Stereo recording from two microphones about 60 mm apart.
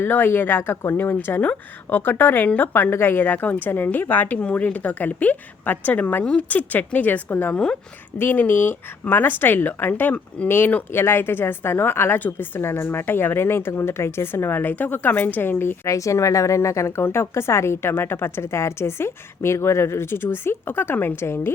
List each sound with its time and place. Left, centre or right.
0.0 s a woman's voice: left
7.5 s speech: centre
8.2 s a woman's voice: left
10.9 s a woman's voice: left
15.9 s a woman's voice: left